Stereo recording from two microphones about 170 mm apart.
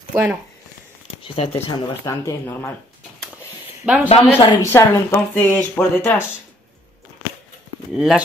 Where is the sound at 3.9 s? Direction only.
10° right (ahead or behind).